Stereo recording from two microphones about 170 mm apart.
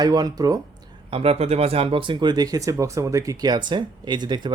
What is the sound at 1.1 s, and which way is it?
Speech, 35° right (ahead or behind).